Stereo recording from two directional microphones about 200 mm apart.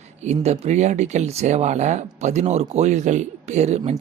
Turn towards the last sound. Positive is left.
turn(degrees=-35)  # may be behind; listen again after turning